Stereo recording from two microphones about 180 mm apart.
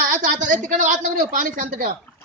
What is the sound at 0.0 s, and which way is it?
A woman's voice, 50° right (ahead or behind).